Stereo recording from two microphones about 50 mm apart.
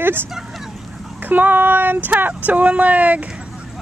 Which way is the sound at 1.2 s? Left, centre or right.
Right.